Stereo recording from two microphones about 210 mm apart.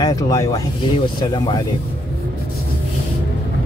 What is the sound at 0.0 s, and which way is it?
Speech, 15° left (ahead or behind).